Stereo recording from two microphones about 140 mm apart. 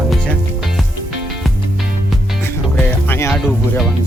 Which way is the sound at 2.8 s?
15° left (ahead or behind).